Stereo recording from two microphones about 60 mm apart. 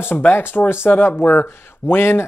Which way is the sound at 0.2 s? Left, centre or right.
Left.